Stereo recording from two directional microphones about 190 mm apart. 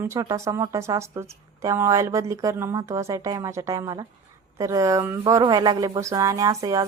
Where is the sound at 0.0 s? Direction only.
15° right (ahead or behind).